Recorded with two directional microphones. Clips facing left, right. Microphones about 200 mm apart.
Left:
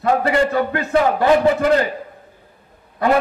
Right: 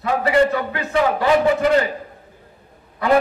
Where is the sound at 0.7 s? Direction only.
50° left (ahead or behind).